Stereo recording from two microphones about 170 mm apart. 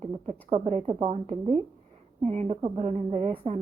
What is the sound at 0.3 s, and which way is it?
A woman's voice, 40° right (ahead or behind).